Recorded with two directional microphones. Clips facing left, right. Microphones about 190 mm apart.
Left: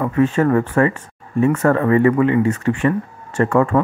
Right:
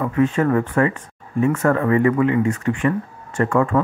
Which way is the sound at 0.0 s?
40° left (ahead or behind).